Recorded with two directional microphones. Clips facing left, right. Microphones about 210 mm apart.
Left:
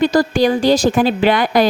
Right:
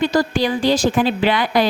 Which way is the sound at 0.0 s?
40° left (ahead or behind).